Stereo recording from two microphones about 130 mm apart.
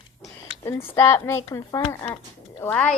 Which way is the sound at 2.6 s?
10° left (ahead or behind).